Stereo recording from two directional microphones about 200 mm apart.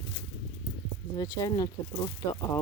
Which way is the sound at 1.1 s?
20° left (ahead or behind).